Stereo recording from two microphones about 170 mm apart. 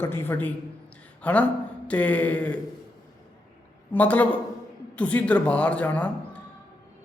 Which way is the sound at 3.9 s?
10° left (ahead or behind).